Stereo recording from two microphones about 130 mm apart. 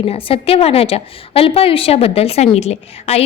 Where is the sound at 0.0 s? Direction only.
45° left (ahead or behind).